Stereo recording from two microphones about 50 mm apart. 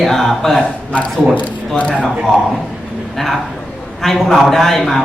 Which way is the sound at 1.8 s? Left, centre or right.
Left.